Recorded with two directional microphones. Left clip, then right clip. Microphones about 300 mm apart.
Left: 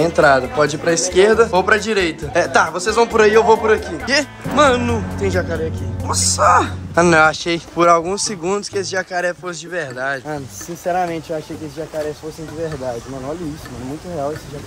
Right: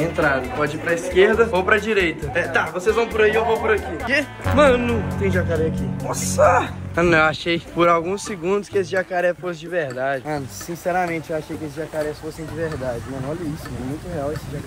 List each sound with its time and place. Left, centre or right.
0.0 s speech: centre
3.2 s music: left
4.1 s speech: centre